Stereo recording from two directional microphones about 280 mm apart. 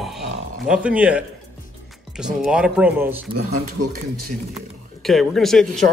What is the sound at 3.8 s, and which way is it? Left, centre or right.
Speech, right.